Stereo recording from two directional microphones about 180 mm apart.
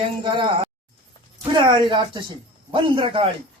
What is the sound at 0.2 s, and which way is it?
Speech, 25° right (ahead or behind).